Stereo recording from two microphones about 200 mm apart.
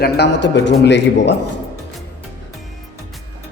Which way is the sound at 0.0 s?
60° left (ahead or behind).